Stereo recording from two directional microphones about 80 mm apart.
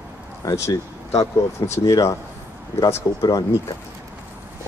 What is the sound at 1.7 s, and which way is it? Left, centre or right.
Speech, left.